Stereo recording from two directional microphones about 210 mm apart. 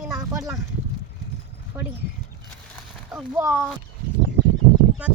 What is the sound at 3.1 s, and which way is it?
Speech, 10° right (ahead or behind).